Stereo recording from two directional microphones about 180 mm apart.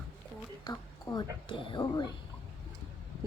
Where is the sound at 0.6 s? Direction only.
20° left (ahead or behind).